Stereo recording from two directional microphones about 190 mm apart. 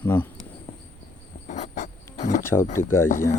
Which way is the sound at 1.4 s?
40° left (ahead or behind).